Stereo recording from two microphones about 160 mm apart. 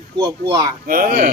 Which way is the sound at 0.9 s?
65° right (ahead or behind).